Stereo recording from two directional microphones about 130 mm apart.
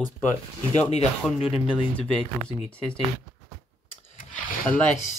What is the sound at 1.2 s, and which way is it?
Speech, centre (ahead or behind).